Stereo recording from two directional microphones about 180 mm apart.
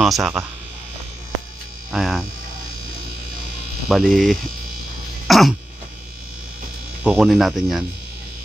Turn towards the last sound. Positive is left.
turn(degrees=0)  # may be behind; listen again after turning